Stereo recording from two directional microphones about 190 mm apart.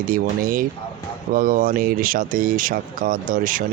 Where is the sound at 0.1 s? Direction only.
45° right (ahead or behind).